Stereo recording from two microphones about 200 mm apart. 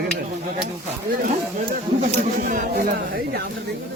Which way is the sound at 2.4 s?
40° right (ahead or behind).